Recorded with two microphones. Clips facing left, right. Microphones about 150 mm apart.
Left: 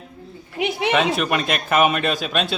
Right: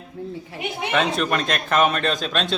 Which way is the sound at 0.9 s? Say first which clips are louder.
Right 1 dB; 5° left (ahead or behind).